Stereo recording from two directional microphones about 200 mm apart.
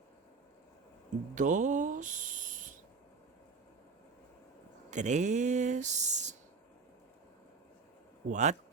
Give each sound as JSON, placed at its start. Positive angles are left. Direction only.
{"t": 1.4, "sound": "a sound", "side_deg": -40}
{"t": 4.9, "sound": "speech", "side_deg": -35}
{"t": 8.3, "sound": "speech", "side_deg": -35}